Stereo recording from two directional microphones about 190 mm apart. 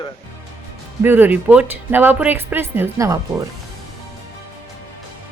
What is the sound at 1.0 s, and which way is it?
Speech, 10° right (ahead or behind).